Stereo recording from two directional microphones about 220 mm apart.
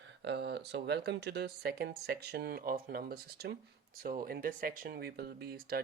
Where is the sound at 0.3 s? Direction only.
50° right (ahead or behind).